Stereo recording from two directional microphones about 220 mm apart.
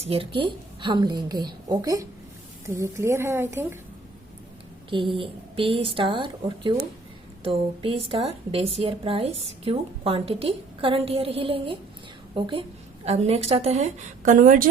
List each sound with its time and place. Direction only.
0.0 s a woman's voice: 25° right (ahead or behind); by 3.8 s 10° right (ahead or behind)
4.9 s a woman's voice: 25° right (ahead or behind)